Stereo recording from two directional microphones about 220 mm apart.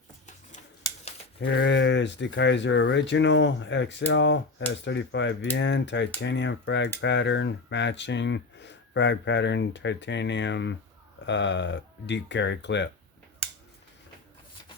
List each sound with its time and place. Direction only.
1.4 s speech: 55° left (ahead or behind)